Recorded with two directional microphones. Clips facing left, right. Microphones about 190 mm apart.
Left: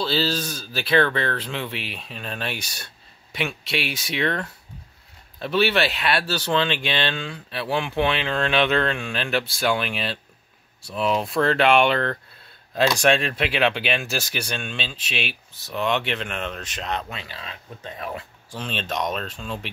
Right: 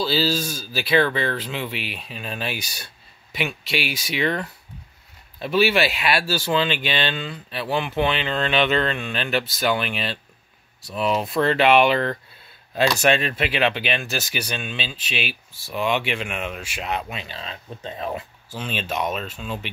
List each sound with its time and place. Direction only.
0.0 s speech: 5° right (ahead or behind)
17.2 s speech: 25° right (ahead or behind)
18.5 s speech: 5° right (ahead or behind)